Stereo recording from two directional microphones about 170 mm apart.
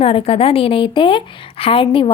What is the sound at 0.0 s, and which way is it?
Speech, 35° left (ahead or behind).